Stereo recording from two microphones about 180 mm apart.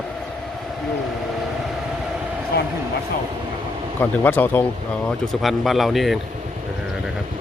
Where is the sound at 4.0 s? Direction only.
10° left (ahead or behind).